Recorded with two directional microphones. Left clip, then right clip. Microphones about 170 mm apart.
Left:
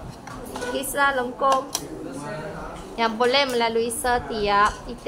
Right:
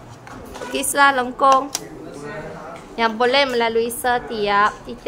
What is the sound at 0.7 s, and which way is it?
Speech, 55° right (ahead or behind).